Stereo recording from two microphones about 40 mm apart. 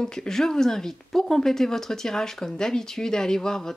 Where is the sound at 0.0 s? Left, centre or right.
Centre.